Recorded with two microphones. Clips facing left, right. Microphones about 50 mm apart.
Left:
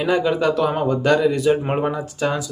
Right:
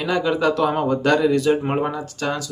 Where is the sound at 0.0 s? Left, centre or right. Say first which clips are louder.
Left 1 dB; centre.